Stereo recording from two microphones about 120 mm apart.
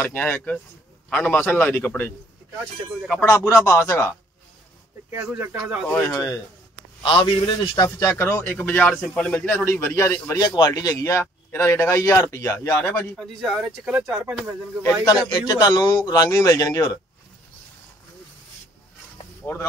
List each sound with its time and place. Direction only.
0.0 s a man's voice: 15° left (ahead or behind)
3.3 s a man's voice: 25° left (ahead or behind)
5.1 s speech: 15° right (ahead or behind)
7.0 s a man's voice: 45° left (ahead or behind); by 10.4 s 20° left (ahead or behind)
10.4 s a man's voice: 35° left (ahead or behind); by 13.0 s 20° left (ahead or behind)
13.1 s speech: centre (ahead or behind)
15.3 s a man's voice: 35° left (ahead or behind)